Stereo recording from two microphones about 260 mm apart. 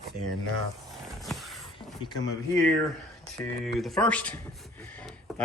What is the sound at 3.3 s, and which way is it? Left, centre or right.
Speech, centre.